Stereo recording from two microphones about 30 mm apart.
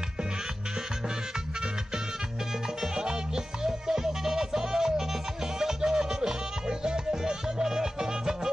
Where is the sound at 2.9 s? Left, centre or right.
Right.